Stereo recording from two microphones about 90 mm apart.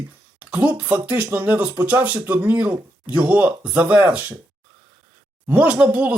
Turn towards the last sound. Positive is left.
turn(degrees=-15)  # may be behind; listen again after turning